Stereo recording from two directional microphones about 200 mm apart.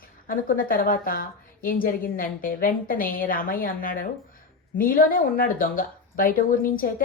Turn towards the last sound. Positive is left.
turn(degrees=45)  # may be behind; listen again after turning